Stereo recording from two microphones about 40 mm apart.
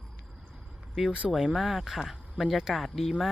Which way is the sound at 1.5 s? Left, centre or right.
Centre.